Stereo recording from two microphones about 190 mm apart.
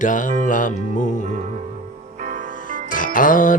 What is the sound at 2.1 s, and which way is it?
Music, 40° right (ahead or behind).